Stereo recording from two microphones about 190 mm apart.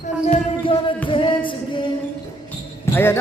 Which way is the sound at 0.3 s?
30° left (ahead or behind).